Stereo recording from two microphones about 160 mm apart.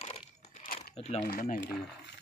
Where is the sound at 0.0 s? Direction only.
40° left (ahead or behind); by 0.9 s 55° left (ahead or behind).